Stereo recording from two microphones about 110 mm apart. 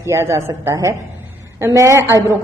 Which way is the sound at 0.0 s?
25° right (ahead or behind).